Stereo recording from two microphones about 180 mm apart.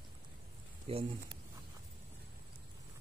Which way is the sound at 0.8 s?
30° right (ahead or behind).